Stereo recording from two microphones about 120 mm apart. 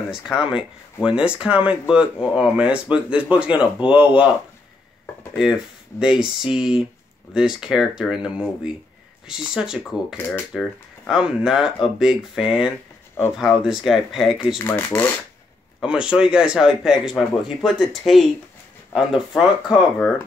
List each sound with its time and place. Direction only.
0.1 s speech: 5° right (ahead or behind)
5.4 s speech: 5° right (ahead or behind)
9.8 s speech: 20° left (ahead or behind)
11.1 s speech: 5° right (ahead or behind)
14.7 s rub: 15° left (ahead or behind)
15.8 s speech: 5° right (ahead or behind)